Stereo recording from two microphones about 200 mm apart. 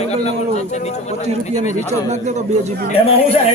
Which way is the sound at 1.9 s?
35° right (ahead or behind).